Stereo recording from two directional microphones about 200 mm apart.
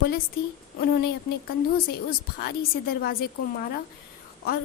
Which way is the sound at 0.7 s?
50° left (ahead or behind).